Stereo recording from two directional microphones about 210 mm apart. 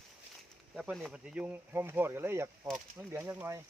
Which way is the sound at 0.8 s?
Centre (ahead or behind).